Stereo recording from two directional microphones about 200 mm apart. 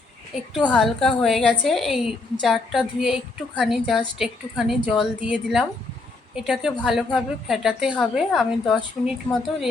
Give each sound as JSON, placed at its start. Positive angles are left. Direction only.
{"t": 0.7, "sound": "a woman's voice", "side_deg": 0}